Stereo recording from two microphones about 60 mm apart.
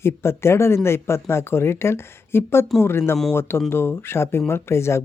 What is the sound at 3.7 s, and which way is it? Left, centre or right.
Speech, left.